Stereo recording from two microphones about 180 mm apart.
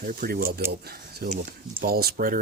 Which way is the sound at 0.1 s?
55° right (ahead or behind).